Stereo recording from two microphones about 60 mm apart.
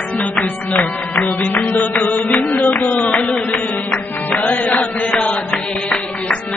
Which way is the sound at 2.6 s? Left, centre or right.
Left.